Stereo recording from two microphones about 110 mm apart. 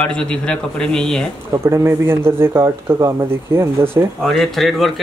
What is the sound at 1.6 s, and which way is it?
Speech, 25° right (ahead or behind).